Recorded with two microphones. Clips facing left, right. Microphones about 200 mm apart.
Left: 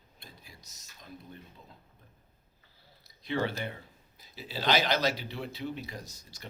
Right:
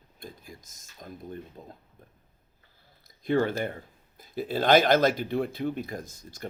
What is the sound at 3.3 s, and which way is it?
Speech, 50° right (ahead or behind).